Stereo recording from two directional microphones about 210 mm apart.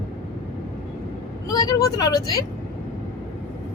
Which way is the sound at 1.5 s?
20° left (ahead or behind).